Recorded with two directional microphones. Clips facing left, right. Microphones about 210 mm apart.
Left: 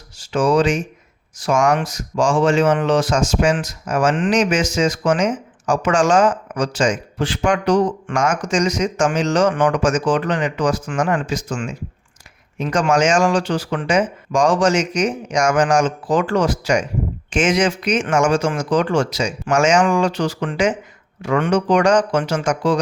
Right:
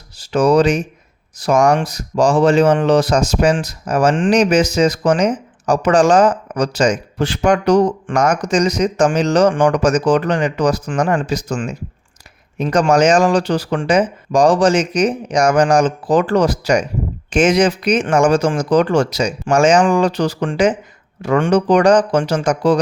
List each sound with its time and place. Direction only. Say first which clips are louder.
0.2 s speech: right 3 dB; 40° right (ahead or behind)